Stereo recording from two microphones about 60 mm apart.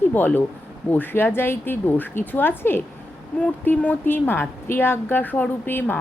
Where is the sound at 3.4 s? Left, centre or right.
Left.